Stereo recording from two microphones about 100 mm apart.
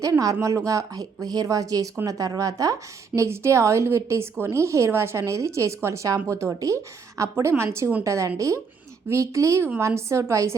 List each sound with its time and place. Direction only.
0.0 s a woman's voice: 35° right (ahead or behind)